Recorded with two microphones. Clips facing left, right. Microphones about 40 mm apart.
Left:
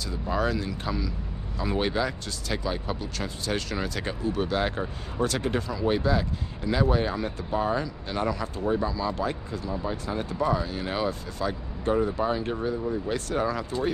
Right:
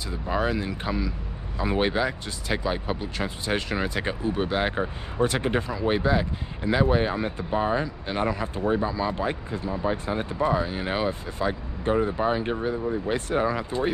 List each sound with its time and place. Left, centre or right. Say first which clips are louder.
0.1 s speech: right 1 dB; right